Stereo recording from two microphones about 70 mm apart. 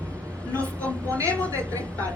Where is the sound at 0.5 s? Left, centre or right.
Centre.